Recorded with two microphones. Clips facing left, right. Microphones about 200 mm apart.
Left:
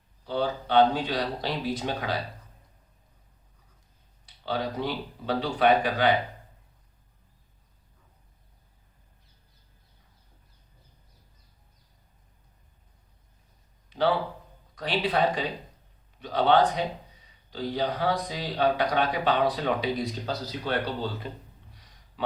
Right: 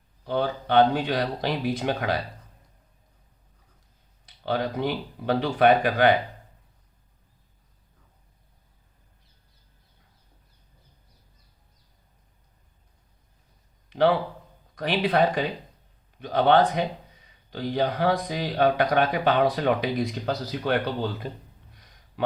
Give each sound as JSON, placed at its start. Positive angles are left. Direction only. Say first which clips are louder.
{"t": 0.3, "sound": "speech", "louder": "right 2 dB", "side_deg": -55}
{"t": 4.4, "sound": "speech", "louder": "right 3 dB", "side_deg": -55}
{"t": 14.8, "sound": "speech", "louder": "right 3 dB", "side_deg": -55}